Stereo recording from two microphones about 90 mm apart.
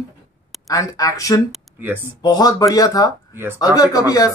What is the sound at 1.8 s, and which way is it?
Speech, 25° right (ahead or behind).